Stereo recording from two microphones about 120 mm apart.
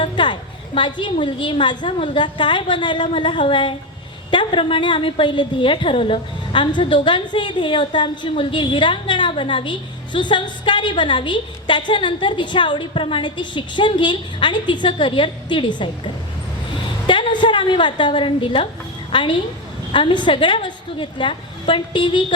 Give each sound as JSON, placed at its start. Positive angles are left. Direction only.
{"t": 0.0, "sound": "a sound", "side_deg": 40}
{"t": 0.8, "sound": "a woman's voice", "side_deg": 40}
{"t": 17.1, "sound": "a woman's voice", "side_deg": 40}